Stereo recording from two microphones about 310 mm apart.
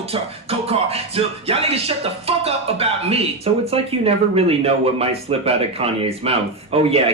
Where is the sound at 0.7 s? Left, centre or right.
Centre.